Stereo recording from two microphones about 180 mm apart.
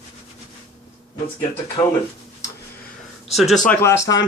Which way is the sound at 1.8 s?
15° left (ahead or behind).